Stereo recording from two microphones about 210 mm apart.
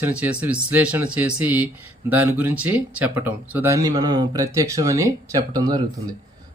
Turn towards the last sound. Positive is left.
turn(degrees=-20)  # may be behind; listen again after turning